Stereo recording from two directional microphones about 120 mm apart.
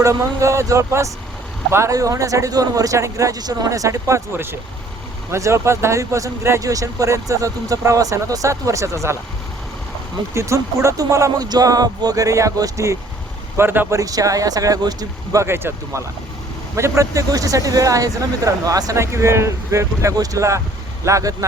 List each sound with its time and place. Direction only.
0.0 s speech: 25° right (ahead or behind)
10.3 s speech: 25° right (ahead or behind)
14.0 s speech: 30° right (ahead or behind)